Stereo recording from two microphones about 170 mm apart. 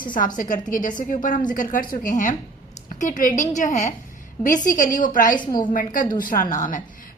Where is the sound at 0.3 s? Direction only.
50° left (ahead or behind).